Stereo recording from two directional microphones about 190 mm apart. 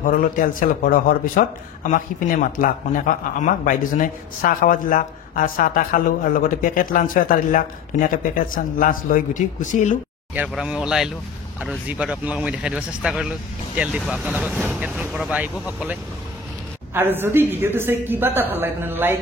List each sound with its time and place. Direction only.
0.0 s speech: 45° left (ahead or behind)
10.3 s speech: 5° right (ahead or behind)